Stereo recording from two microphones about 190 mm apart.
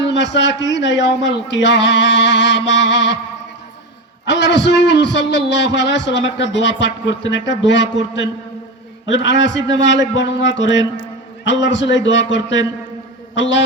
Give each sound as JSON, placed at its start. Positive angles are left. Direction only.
{"t": 0.0, "sound": "a man's voice", "side_deg": 70}
{"t": 4.3, "sound": "a man's voice", "side_deg": 70}